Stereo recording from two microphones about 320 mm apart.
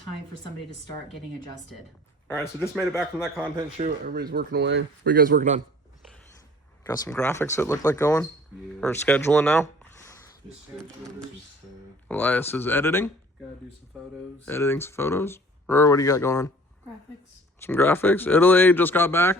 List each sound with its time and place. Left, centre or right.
2.6 s speech: centre
3.3 s speech: centre
6.8 s speech: centre
12.0 s speech: centre
17.6 s speech: centre